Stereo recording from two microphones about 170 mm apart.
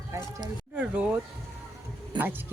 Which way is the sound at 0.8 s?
5° right (ahead or behind).